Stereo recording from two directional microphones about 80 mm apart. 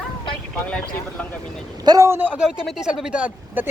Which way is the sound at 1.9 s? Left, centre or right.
Right.